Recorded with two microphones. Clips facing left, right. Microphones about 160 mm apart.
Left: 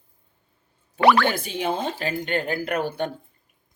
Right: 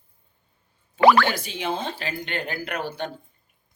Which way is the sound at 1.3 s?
50° left (ahead or behind).